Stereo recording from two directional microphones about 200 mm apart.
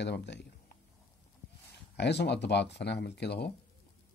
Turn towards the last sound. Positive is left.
turn(degrees=55)  # may be behind; listen again after turning